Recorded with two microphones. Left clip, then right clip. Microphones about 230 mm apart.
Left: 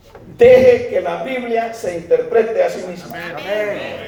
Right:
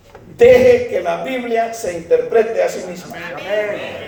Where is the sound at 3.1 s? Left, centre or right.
Left.